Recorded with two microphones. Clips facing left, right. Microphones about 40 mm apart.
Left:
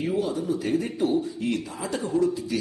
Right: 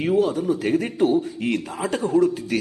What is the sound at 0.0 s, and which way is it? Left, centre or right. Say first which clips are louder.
Speech: right 6 dB; right.